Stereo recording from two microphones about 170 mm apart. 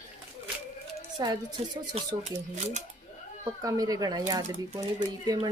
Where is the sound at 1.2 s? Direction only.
25° right (ahead or behind).